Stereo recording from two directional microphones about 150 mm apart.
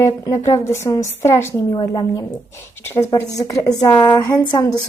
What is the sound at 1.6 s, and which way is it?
A woman's voice, 30° left (ahead or behind).